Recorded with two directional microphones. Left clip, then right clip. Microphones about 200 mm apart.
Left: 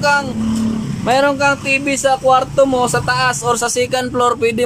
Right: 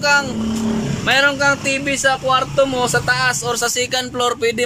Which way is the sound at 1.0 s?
20° left (ahead or behind).